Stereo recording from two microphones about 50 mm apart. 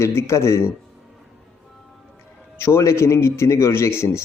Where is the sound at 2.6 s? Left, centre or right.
Left.